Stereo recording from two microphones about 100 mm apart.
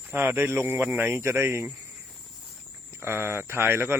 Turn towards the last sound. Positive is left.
turn(degrees=-25)  # may be behind; listen again after turning